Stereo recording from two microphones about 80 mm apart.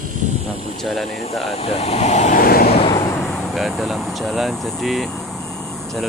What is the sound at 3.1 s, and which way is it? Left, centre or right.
Vehicle, centre.